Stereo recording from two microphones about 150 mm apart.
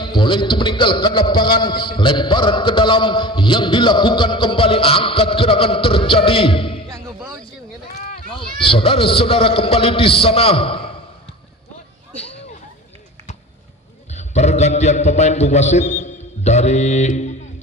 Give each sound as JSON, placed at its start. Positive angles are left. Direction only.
{"t": 0.0, "sound": "a man's voice", "side_deg": 30}
{"t": 8.3, "sound": "a man's voice", "side_deg": 35}
{"t": 12.2, "sound": "a sound", "side_deg": 40}
{"t": 14.1, "sound": "a man's voice", "side_deg": 50}